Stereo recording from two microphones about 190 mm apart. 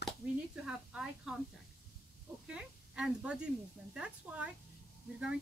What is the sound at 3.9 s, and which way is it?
Speech, 5° right (ahead or behind).